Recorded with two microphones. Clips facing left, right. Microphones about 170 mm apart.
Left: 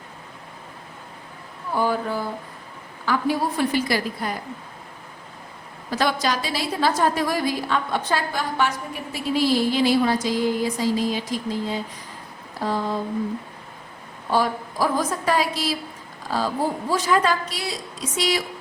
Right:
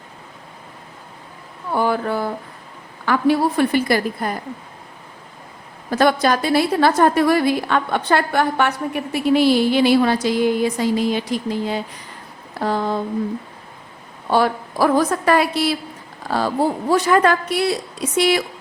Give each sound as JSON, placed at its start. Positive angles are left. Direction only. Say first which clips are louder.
{"t": 1.7, "sound": "a woman's voice", "louder": "right 3 dB", "side_deg": -65}
{"t": 5.9, "sound": "a woman's voice", "louder": "right 6 dB", "side_deg": -55}
{"t": 12.5, "sound": "a sound", "louder": "right 4 dB", "side_deg": -65}
{"t": 14.3, "sound": "a woman's voice", "louder": "right 4 dB", "side_deg": -65}